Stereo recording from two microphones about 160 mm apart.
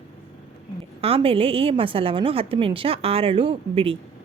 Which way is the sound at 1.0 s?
35° right (ahead or behind).